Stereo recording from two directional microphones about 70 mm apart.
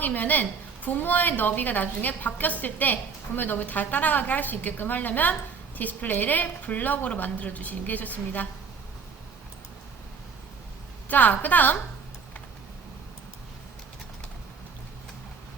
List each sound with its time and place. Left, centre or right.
0.0 s a woman's voice: left
11.1 s a woman's voice: left